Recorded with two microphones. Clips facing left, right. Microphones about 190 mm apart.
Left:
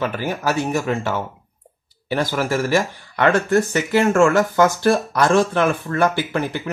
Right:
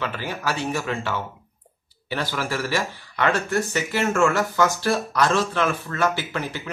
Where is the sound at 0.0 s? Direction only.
45° left (ahead or behind).